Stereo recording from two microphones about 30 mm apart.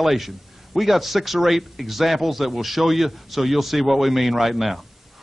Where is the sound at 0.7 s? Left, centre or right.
Centre.